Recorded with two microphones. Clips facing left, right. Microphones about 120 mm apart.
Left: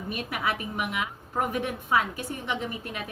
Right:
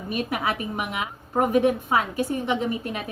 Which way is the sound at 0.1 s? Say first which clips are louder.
Right 4 dB; 30° right (ahead or behind).